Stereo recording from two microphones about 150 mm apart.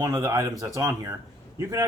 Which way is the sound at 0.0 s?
20° right (ahead or behind).